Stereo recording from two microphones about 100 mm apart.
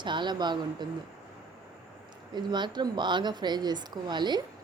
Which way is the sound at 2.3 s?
50° right (ahead or behind).